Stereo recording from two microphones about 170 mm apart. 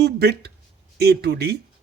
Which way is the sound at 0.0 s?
70° right (ahead or behind).